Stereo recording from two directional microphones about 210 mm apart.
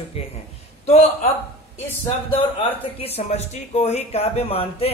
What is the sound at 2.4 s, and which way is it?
A man's voice, 25° left (ahead or behind).